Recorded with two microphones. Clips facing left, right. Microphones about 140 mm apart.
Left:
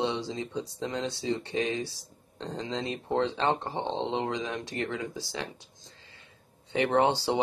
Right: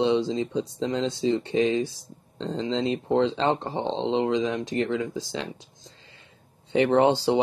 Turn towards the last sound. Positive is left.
turn(degrees=-20)  # may be behind; listen again after turning